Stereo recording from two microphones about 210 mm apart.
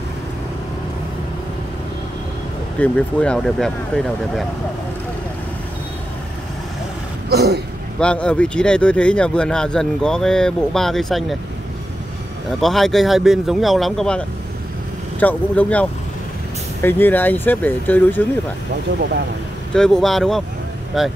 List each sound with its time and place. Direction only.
2.8 s speech: 5° left (ahead or behind)
7.2 s speech: 50° right (ahead or behind)
8.0 s speech: 5° left (ahead or behind)
12.4 s speech: centre (ahead or behind)
19.7 s speech: 5° left (ahead or behind)